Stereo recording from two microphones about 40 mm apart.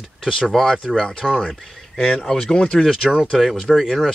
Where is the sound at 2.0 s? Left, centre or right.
Centre.